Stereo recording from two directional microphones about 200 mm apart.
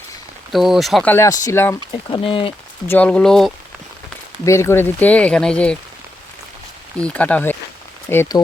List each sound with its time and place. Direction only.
0.5 s speech: centre (ahead or behind)
1.1 s speech: 15° left (ahead or behind)
2.0 s speech: 25° left (ahead or behind)
2.8 s speech: 10° left (ahead or behind)
4.4 s speech: 15° left (ahead or behind)
7.0 s speech: 5° left (ahead or behind)